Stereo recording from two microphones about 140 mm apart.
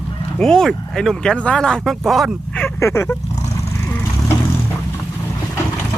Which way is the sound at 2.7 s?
20° left (ahead or behind).